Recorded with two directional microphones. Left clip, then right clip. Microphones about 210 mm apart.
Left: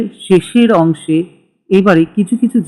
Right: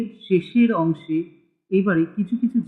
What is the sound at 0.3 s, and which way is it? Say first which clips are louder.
Speech: left 10 dB; 10° left (ahead or behind).